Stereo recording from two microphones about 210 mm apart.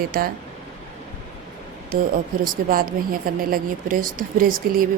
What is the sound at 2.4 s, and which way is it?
Speech, 45° right (ahead or behind).